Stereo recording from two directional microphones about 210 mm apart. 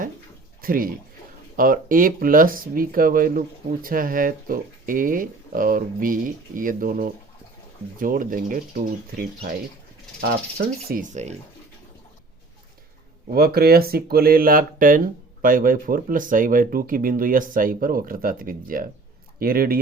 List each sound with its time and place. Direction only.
0.6 s speech: 45° right (ahead or behind)
10.8 s speech: 40° right (ahead or behind)
13.3 s speech: 45° right (ahead or behind)